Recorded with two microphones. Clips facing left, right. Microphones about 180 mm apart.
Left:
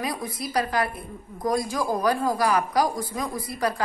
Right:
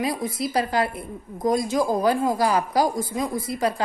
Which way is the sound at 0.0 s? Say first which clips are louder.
Right 5 dB; 25° right (ahead or behind).